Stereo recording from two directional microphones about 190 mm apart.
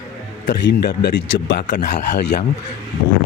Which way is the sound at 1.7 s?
40° left (ahead or behind).